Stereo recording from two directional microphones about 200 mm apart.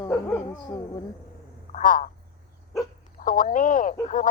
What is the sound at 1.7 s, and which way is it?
Speech, 40° left (ahead or behind).